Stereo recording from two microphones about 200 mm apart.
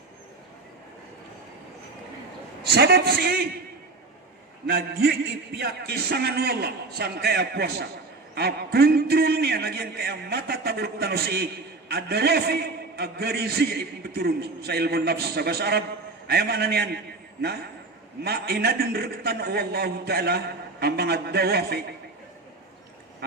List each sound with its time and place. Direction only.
2.7 s a man's voice: 55° right (ahead or behind)
4.6 s a man's voice: 55° right (ahead or behind)
18.2 s a man's voice: 55° right (ahead or behind)